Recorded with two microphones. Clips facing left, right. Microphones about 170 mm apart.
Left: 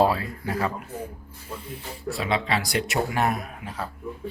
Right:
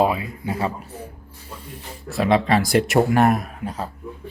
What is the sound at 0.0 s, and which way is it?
Speech, 20° right (ahead or behind).